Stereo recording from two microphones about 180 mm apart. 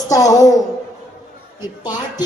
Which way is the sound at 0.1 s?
20° left (ahead or behind).